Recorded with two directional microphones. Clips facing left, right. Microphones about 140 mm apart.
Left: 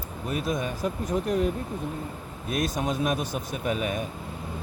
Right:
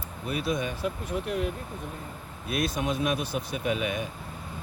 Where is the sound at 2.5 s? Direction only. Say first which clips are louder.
Left 1 dB; 40° left (ahead or behind).